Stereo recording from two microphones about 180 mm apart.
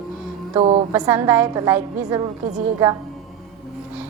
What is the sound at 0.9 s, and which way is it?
A woman's voice, 15° right (ahead or behind).